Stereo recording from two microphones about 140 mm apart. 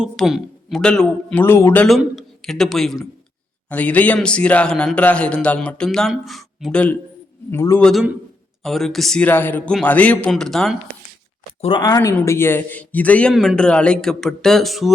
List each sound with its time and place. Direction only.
0.0 s speech: 5° right (ahead or behind)
1.5 s speech: 15° left (ahead or behind)
1.9 s a man's voice: centre (ahead or behind)
7.5 s speech: 20° left (ahead or behind)
7.8 s speech: 5° left (ahead or behind)
11.8 s speech: 25° left (ahead or behind); by 13.3 s 10° left (ahead or behind)
13.3 s speech: 5° right (ahead or behind)
13.6 s speech: 5° left (ahead or behind)